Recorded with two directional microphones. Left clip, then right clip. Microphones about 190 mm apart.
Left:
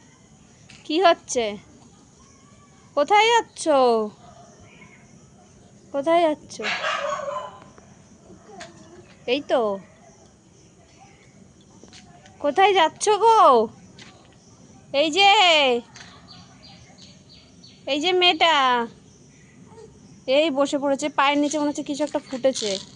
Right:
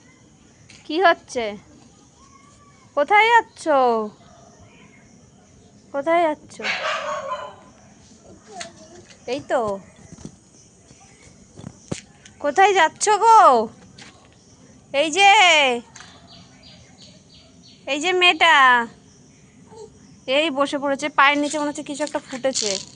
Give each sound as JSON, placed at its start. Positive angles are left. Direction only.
{"t": 0.9, "sound": "speech", "side_deg": 10}
{"t": 2.9, "sound": "speech", "side_deg": 15}
{"t": 5.9, "sound": "speech", "side_deg": 20}
{"t": 9.2, "sound": "a woman's voice", "side_deg": 25}
{"t": 12.4, "sound": "speech", "side_deg": 15}
{"t": 14.9, "sound": "speech", "side_deg": 15}
{"t": 17.8, "sound": "speech", "side_deg": 15}
{"t": 20.2, "sound": "a woman's voice", "side_deg": 20}